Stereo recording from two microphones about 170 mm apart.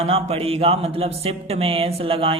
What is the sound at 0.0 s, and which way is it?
Speech, 35° right (ahead or behind).